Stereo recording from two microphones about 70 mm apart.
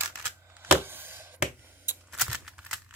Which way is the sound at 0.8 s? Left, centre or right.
Right.